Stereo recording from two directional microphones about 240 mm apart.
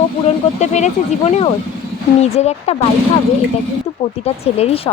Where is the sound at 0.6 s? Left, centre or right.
Left.